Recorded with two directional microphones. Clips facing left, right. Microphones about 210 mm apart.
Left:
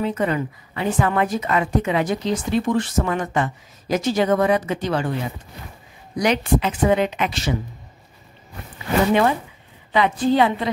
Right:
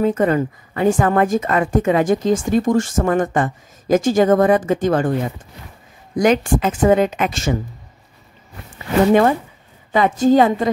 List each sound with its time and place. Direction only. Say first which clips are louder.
0.0 s a woman's voice: right 6 dB; 45° right (ahead or behind)
6.1 s a woman's voice: right 4 dB; 45° right (ahead or behind)
9.9 s a woman's voice: right 4 dB; 45° right (ahead or behind)